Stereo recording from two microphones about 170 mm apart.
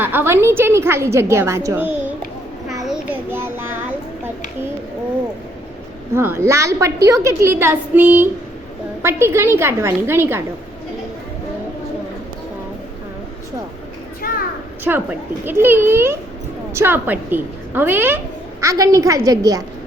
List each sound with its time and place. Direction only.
0.0 s a woman's voice: 10° right (ahead or behind)
2.8 s child singing: 5° right (ahead or behind)
6.1 s a woman's voice: 15° right (ahead or behind)
14.2 s a sound: 60° left (ahead or behind)
14.9 s a woman's voice: 5° right (ahead or behind)